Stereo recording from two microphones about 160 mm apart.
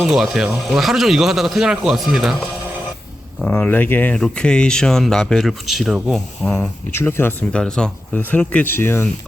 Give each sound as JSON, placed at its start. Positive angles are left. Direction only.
{"t": 0.0, "sound": "speech", "side_deg": 0}
{"t": 3.4, "sound": "speech", "side_deg": 10}